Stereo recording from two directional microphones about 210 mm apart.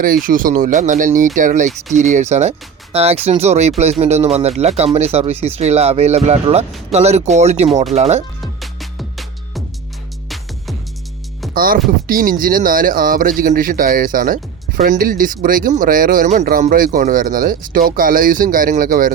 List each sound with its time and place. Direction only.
0.0 s speech: 40° right (ahead or behind)
8.6 s music: centre (ahead or behind)
11.5 s speech: 45° right (ahead or behind)